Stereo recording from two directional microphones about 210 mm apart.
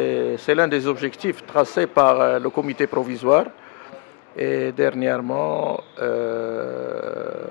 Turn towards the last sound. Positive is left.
turn(degrees=20)  # may be behind; listen again after turning